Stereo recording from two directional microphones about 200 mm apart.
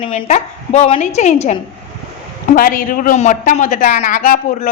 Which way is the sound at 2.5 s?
45° left (ahead or behind).